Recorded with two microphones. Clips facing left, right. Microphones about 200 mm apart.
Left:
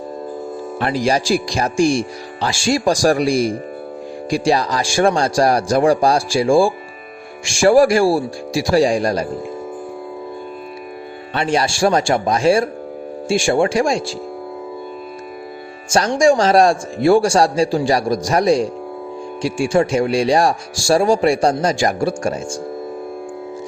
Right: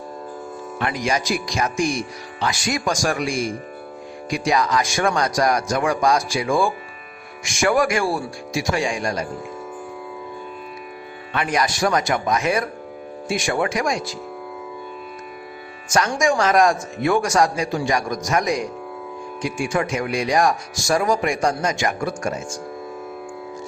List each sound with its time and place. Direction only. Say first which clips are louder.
0.8 s speech: left 5 dB; 35° left (ahead or behind)
11.3 s speech: left 4 dB; 30° left (ahead or behind)
15.9 s speech: left 6 dB; 30° left (ahead or behind)